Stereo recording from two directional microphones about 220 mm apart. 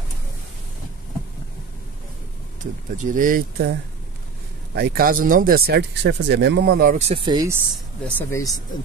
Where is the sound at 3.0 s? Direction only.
35° right (ahead or behind).